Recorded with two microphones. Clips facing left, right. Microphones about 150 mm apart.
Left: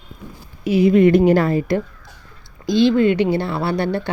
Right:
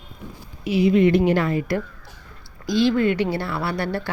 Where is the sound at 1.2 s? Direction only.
40° left (ahead or behind).